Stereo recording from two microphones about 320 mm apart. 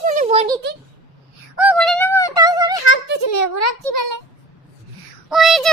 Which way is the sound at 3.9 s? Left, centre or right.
Right.